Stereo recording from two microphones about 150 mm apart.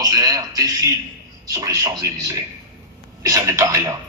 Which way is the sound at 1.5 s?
25° right (ahead or behind).